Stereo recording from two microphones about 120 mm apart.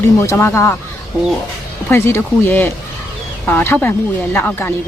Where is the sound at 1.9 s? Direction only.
20° left (ahead or behind).